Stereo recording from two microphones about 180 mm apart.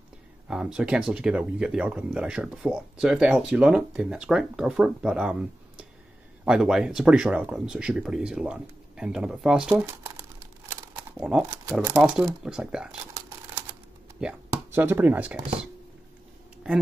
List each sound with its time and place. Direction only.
0.5 s speech: 5° right (ahead or behind)
9.8 s crumpling: 15° right (ahead or behind)
12.0 s speech: 5° right (ahead or behind)
14.2 s speech: 10° right (ahead or behind)